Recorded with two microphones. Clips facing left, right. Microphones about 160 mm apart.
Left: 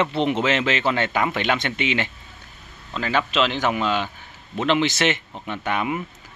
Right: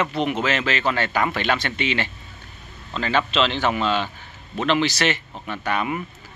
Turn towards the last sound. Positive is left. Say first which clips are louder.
# even
turn(degrees=15)  # may be behind; listen again after turning